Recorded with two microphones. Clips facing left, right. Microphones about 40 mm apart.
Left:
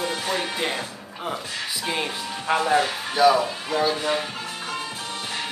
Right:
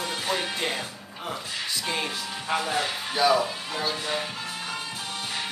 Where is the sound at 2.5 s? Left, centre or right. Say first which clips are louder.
Left 7 dB; left.